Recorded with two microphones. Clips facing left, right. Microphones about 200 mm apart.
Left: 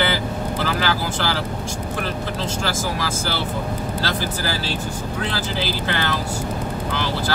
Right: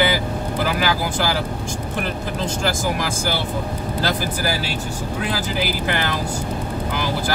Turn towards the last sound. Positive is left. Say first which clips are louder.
# right 1 dB
turn(degrees=-15)  # may be behind; listen again after turning